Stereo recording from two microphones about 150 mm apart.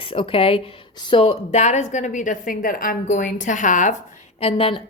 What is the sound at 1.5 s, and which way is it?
A woman's voice, 50° left (ahead or behind).